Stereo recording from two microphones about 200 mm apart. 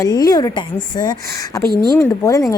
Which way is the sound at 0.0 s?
20° left (ahead or behind).